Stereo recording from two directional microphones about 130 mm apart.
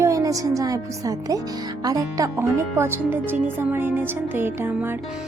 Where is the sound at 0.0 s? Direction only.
25° right (ahead or behind).